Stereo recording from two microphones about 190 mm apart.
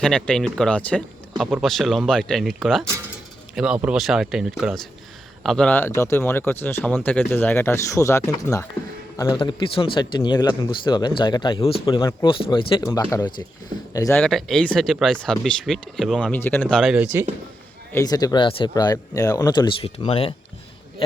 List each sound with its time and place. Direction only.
0.0 s speech: 5° left (ahead or behind)
14.2 s speech: centre (ahead or behind)
17.9 s speech: 20° left (ahead or behind)